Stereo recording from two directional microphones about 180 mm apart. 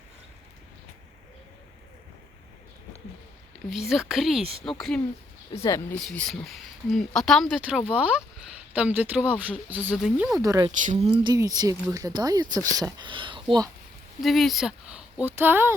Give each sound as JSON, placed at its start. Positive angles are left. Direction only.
{"t": 3.7, "sound": "speech", "side_deg": 0}
{"t": 5.6, "sound": "speech", "side_deg": 15}
{"t": 6.1, "sound": "speech", "side_deg": 0}
{"t": 10.4, "sound": "speech", "side_deg": -20}
{"t": 14.2, "sound": "speech", "side_deg": 0}